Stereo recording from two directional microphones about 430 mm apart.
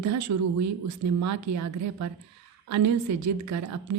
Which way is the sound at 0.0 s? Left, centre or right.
Right.